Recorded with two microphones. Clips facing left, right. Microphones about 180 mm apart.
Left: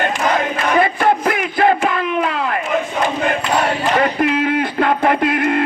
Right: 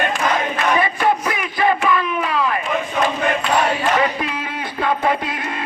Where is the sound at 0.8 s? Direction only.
50° left (ahead or behind).